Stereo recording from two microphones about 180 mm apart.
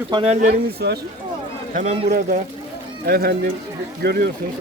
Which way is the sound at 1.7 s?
40° right (ahead or behind).